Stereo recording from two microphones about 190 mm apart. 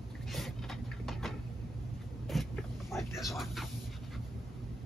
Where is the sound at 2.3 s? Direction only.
Centre (ahead or behind).